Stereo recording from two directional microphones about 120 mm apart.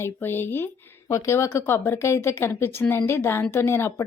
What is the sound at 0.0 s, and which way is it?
Speech, 15° left (ahead or behind).